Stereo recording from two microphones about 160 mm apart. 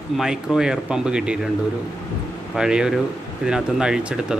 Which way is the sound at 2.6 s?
5° right (ahead or behind).